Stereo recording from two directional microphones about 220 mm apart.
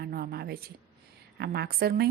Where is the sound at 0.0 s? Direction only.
45° right (ahead or behind).